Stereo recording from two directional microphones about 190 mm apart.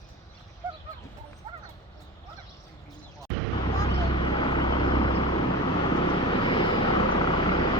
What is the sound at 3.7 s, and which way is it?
Vehicle, 20° left (ahead or behind).